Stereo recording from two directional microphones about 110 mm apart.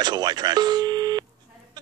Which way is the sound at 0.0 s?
40° right (ahead or behind).